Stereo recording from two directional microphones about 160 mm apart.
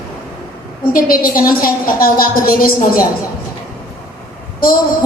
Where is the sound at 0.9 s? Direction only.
60° left (ahead or behind).